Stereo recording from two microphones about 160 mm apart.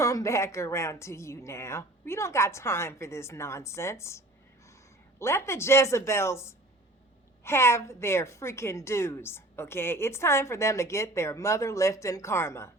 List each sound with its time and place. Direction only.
0.0 s a woman's voice: 20° left (ahead or behind)
5.2 s a woman's voice: 15° left (ahead or behind)